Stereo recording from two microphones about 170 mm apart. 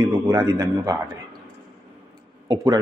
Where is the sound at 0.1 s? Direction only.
15° right (ahead or behind).